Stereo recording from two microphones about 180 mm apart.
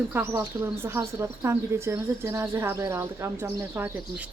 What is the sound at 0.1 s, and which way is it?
Speech, 15° right (ahead or behind).